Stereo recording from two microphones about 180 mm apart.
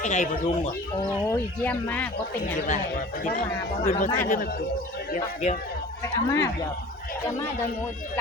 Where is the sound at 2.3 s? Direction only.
45° left (ahead or behind).